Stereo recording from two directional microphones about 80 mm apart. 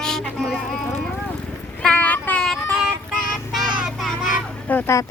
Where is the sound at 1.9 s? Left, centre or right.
Left.